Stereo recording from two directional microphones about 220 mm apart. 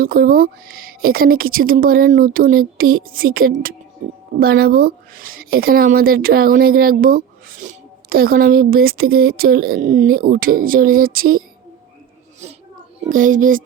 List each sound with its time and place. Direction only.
0.0 s a woman's voice: 40° right (ahead or behind)
13.0 s a woman's voice: 35° right (ahead or behind)